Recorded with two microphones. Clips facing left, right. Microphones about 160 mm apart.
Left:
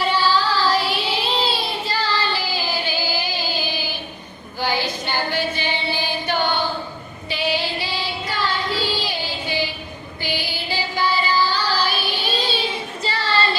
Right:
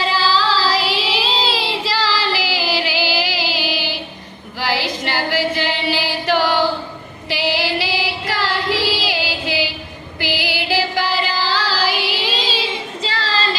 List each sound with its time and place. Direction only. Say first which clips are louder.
0.0 s child singing: right 1 dB; 90° right
4.6 s singing: right 2 dB; 90° right
7.3 s female singing: right 3 dB; 90° right